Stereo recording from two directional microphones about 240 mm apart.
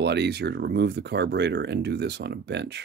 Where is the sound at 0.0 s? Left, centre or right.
Right.